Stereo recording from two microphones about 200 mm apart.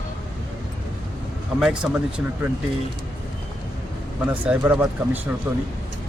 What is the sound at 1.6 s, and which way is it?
Speech, 5° right (ahead or behind).